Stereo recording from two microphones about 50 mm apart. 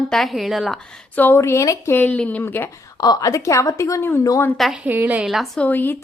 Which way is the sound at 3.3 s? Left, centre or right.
Left.